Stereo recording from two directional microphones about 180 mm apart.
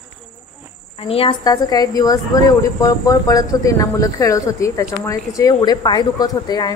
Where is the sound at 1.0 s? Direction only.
30° left (ahead or behind).